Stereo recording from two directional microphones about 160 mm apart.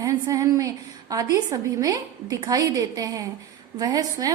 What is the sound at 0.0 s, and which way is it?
A woman's voice, 20° right (ahead or behind).